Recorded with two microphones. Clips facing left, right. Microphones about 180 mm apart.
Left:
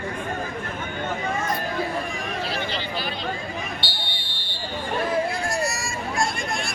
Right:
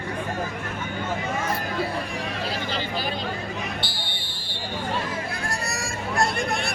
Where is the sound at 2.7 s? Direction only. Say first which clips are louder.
Right 1 dB; 45° right (ahead or behind).